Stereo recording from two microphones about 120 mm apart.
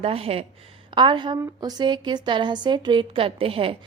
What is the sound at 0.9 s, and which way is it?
A woman's voice, 40° right (ahead or behind).